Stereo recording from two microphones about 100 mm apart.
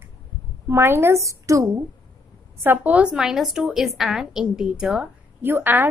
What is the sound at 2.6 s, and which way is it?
A woman's voice, 20° right (ahead or behind).